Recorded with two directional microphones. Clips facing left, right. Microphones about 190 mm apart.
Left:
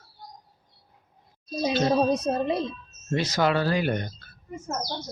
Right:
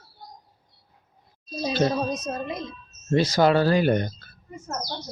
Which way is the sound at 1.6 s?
30° left (ahead or behind).